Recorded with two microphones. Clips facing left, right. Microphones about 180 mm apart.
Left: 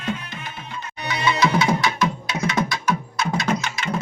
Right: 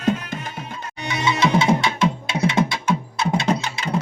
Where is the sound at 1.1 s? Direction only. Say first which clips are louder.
Right 1 dB; 25° right (ahead or behind).